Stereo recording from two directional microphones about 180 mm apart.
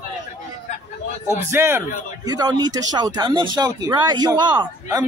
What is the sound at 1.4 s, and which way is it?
A man's voice, 15° right (ahead or behind).